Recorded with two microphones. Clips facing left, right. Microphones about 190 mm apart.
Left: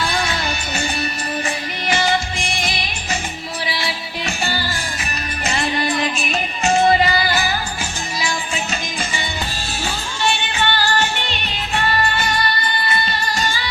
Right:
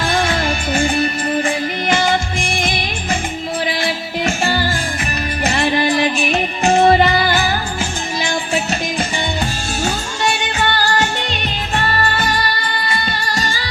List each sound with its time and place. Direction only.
0.0 s music: 50° right (ahead or behind)
5.4 s music: 60° right (ahead or behind)
9.8 s music: 40° right (ahead or behind)